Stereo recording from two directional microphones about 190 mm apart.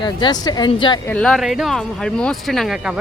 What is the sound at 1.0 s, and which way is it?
Speech, 5° left (ahead or behind).